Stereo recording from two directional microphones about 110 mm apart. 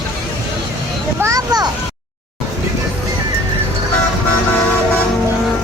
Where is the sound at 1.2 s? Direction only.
30° right (ahead or behind).